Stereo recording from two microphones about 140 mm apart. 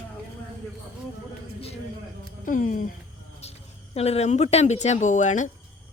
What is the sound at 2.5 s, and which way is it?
Speech, 70° left (ahead or behind).